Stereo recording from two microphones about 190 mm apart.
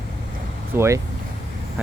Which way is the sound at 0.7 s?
15° right (ahead or behind).